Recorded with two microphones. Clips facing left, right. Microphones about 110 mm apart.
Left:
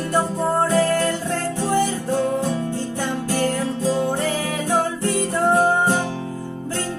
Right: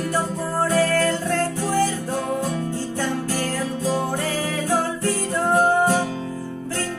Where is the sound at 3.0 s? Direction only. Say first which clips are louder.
Left 4 dB; 20° left (ahead or behind).